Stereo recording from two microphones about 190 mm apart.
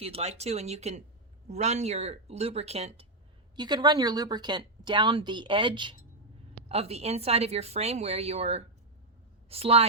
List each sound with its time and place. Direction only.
0.0 s a woman's voice: 35° right (ahead or behind)
3.5 s a woman's voice: 20° right (ahead or behind)